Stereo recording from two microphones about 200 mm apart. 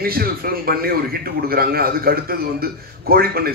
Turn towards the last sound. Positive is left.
turn(degrees=-50)  # may be behind; listen again after turning